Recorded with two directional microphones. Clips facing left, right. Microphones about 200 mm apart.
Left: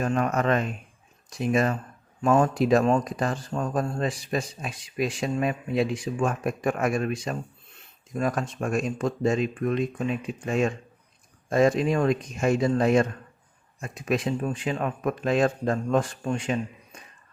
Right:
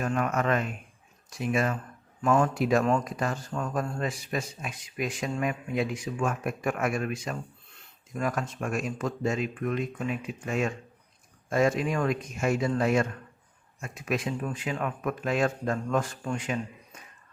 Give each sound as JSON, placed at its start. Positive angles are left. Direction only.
{"t": 0.1, "sound": "a man's voice", "side_deg": 35}